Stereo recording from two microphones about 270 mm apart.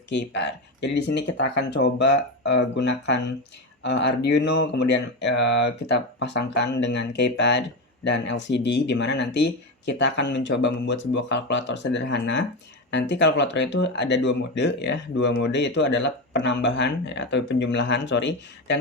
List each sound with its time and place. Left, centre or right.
0.1 s speech: left